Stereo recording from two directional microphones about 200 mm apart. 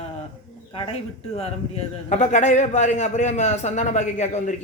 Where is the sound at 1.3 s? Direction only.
30° left (ahead or behind).